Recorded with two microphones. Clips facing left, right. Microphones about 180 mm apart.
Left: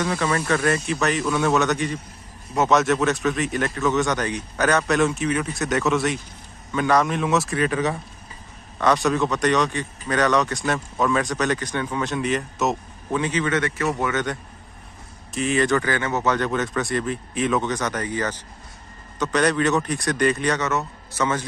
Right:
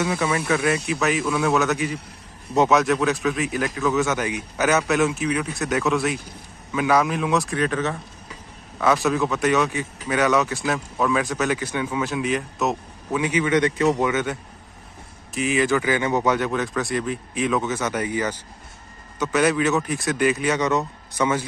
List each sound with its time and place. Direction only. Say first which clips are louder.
0.0 s speech: even; 10° right (ahead or behind); by 8.0 s 10° left (ahead or behind)
8.7 s speech: even; centre (ahead or behind)
13.2 s speech: right 4 dB; 10° right (ahead or behind)
15.3 s speech: even; centre (ahead or behind)
15.8 s speech: right 2 dB; 15° right (ahead or behind)